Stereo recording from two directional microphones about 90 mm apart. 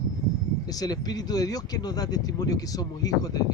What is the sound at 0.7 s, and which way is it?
Speech, 45° left (ahead or behind).